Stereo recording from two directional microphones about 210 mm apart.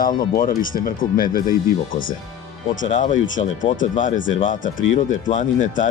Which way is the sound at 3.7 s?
40° left (ahead or behind).